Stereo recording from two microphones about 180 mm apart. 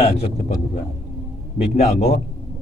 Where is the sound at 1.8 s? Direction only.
35° left (ahead or behind).